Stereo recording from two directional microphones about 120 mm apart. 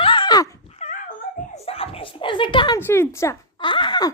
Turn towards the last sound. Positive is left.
turn(degrees=40)  # may be behind; listen again after turning